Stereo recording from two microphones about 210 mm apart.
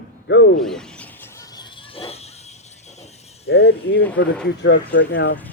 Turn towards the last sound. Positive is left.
turn(degrees=60)  # may be behind; listen again after turning